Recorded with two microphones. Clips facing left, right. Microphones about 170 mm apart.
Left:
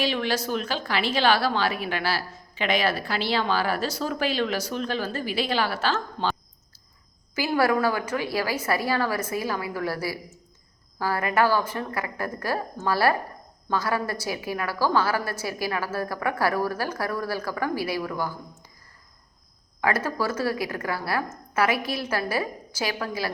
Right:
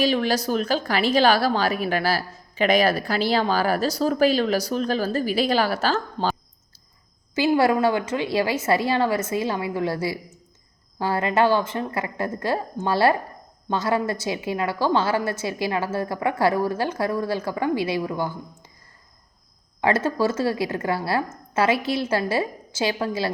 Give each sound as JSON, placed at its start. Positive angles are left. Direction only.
{"t": 0.0, "sound": "a woman's voice", "side_deg": -40}
{"t": 7.3, "sound": "a woman's voice", "side_deg": -25}
{"t": 19.8, "sound": "a woman's voice", "side_deg": -25}